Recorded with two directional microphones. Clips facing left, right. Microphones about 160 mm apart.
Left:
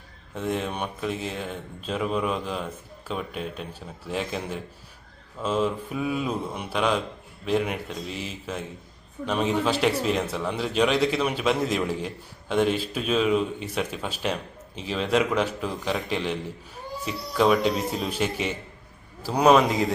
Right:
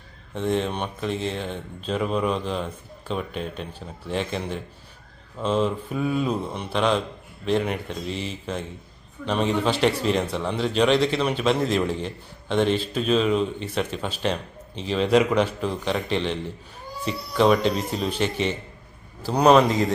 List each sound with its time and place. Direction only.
0.3 s speech: 5° left (ahead or behind)